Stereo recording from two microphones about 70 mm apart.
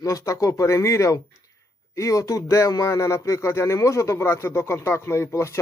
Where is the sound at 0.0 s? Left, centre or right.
Left.